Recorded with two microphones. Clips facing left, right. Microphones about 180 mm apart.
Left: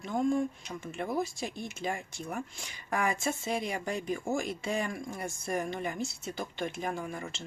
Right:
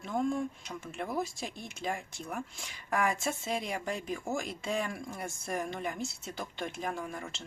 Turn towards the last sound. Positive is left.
turn(degrees=0)  # may be behind; listen again after turning